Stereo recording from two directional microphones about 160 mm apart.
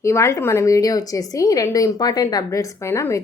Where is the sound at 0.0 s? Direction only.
20° left (ahead or behind).